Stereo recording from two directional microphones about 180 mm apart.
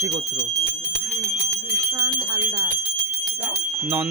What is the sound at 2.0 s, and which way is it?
Speech, 20° right (ahead or behind).